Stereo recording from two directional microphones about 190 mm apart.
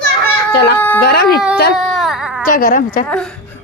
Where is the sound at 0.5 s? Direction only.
60° left (ahead or behind).